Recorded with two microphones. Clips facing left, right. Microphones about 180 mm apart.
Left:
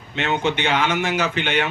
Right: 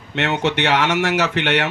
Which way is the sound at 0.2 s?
75° right (ahead or behind).